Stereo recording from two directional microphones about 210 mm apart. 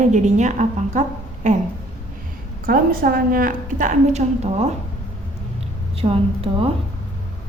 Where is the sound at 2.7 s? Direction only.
45° right (ahead or behind).